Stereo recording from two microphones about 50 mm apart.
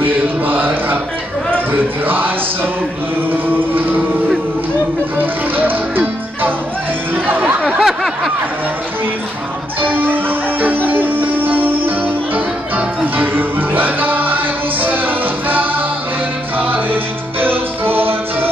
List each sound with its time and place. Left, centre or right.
0.0 s mantra: right
1.7 s music: right
5.1 s music: right
7.2 s a sound: right
7.6 s a sound: centre
9.8 s music: right